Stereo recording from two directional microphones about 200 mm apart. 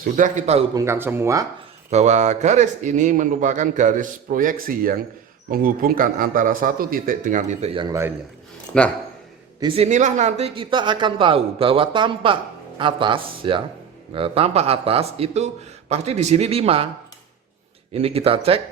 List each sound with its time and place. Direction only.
0.0 s speech: 40° right (ahead or behind)
0.7 s speech: 15° right (ahead or behind)
1.9 s a man's voice: 35° right (ahead or behind)
8.7 s a man's voice: 5° left (ahead or behind)
9.6 s speech: 25° right (ahead or behind)
17.9 s speech: 30° right (ahead or behind)